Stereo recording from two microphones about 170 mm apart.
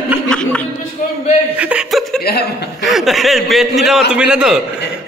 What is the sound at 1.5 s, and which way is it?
A man's voice, 5° right (ahead or behind).